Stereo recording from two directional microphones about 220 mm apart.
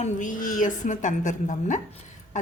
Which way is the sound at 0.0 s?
35° left (ahead or behind).